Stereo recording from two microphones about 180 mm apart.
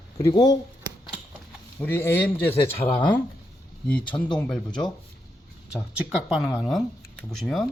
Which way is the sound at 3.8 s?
5° left (ahead or behind).